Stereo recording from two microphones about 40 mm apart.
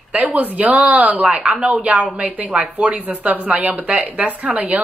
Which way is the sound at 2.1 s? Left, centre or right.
Right.